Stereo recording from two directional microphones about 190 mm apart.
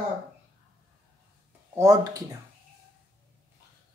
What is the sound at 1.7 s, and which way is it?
Speech, 20° right (ahead or behind).